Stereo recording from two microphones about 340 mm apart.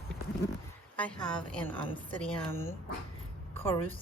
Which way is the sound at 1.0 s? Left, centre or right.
Centre.